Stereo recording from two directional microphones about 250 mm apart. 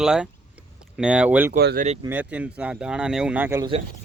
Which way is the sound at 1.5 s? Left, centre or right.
Right.